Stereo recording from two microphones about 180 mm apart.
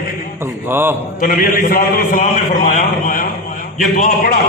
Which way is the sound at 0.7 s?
10° right (ahead or behind).